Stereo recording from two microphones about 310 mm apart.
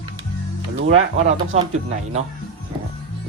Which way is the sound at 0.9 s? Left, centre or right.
Centre.